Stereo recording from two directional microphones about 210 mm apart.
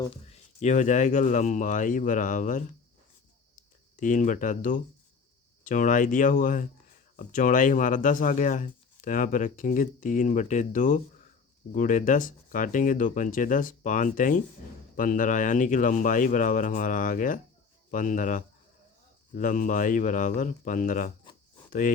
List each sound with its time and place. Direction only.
0.0 s speech: 30° left (ahead or behind)